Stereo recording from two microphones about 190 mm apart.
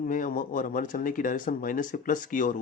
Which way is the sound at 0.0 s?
45° left (ahead or behind).